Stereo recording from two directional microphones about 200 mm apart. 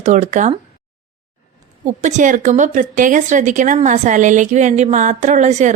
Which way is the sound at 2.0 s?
35° right (ahead or behind).